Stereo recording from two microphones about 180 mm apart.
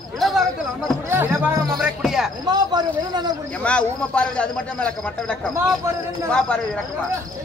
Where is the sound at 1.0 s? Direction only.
10° right (ahead or behind).